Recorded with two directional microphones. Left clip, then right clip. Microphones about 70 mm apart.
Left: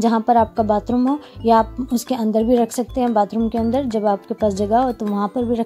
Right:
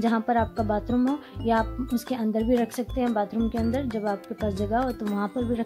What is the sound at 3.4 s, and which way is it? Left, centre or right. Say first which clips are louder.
Speech: left 8 dB; centre.